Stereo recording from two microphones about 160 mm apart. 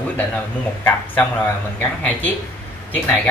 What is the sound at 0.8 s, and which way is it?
Speech, 10° left (ahead or behind).